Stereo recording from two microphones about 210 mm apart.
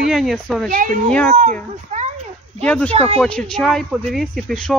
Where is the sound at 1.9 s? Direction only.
35° right (ahead or behind).